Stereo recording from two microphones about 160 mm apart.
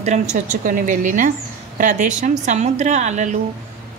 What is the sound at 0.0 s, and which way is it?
A woman's voice, 45° right (ahead or behind).